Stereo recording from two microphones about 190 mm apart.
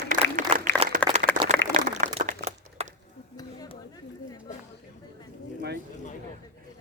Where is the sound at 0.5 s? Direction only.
30° right (ahead or behind).